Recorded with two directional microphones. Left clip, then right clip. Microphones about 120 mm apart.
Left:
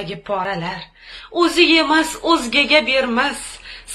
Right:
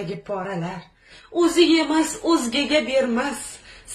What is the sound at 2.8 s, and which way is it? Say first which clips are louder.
Speech: left 4 dB; 15° right (ahead or behind).